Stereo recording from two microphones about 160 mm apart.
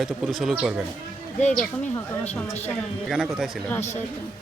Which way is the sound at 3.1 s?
5° right (ahead or behind).